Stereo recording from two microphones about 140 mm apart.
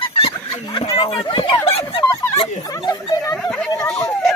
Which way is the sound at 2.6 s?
25° left (ahead or behind).